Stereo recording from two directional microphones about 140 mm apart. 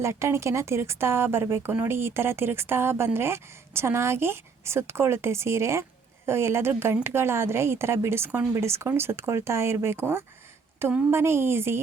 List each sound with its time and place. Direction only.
0.0 s speech: 20° right (ahead or behind)